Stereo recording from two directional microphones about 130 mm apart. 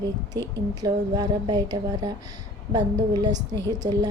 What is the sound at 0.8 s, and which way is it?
A woman's voice, 30° right (ahead or behind).